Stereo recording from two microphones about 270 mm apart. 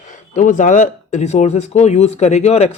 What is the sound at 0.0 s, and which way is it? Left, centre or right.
Speech, left.